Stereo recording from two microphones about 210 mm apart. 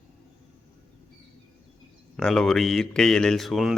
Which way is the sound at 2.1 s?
Centre (ahead or behind).